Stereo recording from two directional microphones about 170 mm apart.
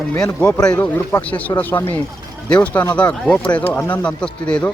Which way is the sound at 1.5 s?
20° left (ahead or behind).